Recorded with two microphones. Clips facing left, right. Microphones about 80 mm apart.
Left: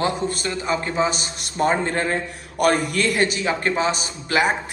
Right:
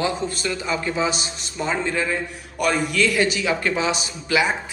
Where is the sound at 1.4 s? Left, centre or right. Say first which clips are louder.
Left 5 dB; left.